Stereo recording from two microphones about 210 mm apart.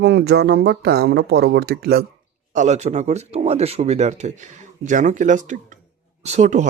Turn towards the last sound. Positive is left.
turn(degrees=-35)  # may be behind; listen again after turning